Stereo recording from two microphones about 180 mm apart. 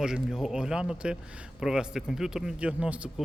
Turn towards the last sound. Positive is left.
turn(degrees=-5)  # may be behind; listen again after turning